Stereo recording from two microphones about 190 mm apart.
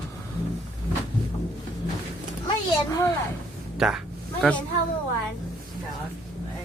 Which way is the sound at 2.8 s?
15° left (ahead or behind).